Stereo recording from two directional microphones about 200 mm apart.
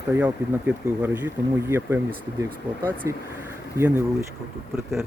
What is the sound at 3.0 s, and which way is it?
Speech, 15° right (ahead or behind).